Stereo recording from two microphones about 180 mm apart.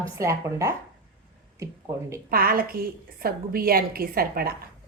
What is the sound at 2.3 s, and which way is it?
A woman's voice, 55° right (ahead or behind).